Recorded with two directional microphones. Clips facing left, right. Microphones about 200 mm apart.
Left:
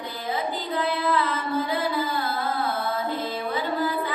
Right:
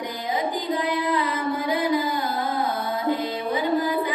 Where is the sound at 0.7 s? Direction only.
15° right (ahead or behind).